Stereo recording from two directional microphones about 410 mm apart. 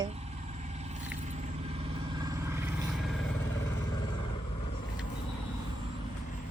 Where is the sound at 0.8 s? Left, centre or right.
Centre.